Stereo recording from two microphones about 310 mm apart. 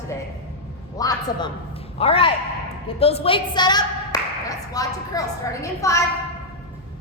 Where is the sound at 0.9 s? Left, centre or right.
Centre.